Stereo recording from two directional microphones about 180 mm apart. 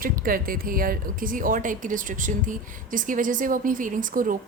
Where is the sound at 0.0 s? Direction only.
50° right (ahead or behind).